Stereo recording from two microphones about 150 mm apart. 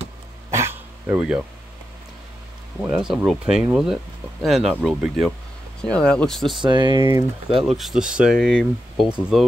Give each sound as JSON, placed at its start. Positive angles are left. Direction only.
{"t": 0.5, "sound": "a sound", "side_deg": -20}
{"t": 2.8, "sound": "speech", "side_deg": -5}
{"t": 6.6, "sound": "speech", "side_deg": -30}
{"t": 7.6, "sound": "speech", "side_deg": 0}